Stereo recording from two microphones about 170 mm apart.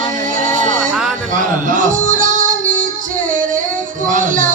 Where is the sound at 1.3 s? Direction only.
50° right (ahead or behind).